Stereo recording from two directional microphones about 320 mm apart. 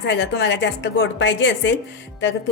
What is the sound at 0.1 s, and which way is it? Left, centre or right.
Speech, left.